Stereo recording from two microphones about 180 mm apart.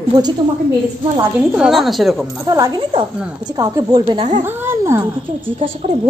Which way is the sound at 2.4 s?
20° right (ahead or behind).